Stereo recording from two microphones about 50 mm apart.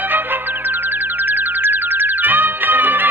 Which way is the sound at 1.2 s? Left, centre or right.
Right.